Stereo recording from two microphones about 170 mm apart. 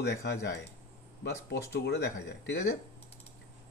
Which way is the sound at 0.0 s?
85° left.